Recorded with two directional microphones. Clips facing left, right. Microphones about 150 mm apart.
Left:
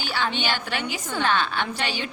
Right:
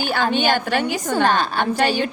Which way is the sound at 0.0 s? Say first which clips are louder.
Right 7 dB; 50° right (ahead or behind).